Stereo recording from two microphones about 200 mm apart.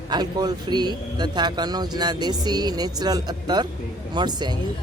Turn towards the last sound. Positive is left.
turn(degrees=-20)  # may be behind; listen again after turning